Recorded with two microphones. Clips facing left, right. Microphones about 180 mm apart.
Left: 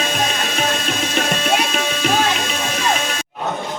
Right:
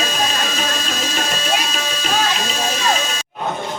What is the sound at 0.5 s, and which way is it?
Music, 55° left (ahead or behind).